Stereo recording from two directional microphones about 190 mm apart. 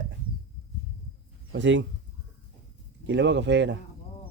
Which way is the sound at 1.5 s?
70° right (ahead or behind).